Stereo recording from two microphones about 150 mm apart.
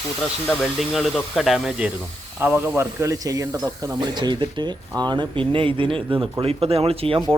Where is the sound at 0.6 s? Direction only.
Centre (ahead or behind).